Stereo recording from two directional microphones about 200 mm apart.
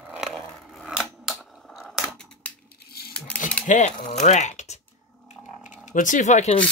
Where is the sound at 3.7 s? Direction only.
35° left (ahead or behind).